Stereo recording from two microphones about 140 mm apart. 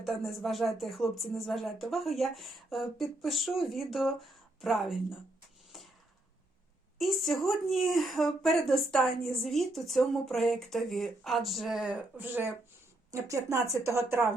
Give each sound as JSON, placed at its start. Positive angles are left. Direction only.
{"t": 0.0, "sound": "a woman's voice", "side_deg": 0}
{"t": 5.7, "sound": "a sound", "side_deg": 0}
{"t": 7.0, "sound": "a woman's voice", "side_deg": 0}